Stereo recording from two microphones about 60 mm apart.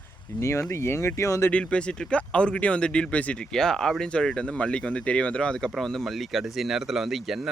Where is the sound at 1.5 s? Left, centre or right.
Centre.